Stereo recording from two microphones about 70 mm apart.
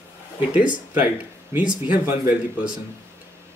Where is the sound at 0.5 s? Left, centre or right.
Right.